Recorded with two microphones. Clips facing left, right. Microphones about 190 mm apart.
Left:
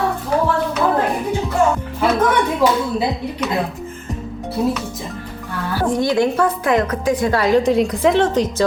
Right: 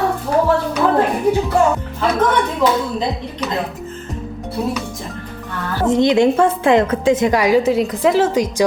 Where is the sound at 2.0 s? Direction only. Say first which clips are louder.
Left 2 dB; 10° left (ahead or behind).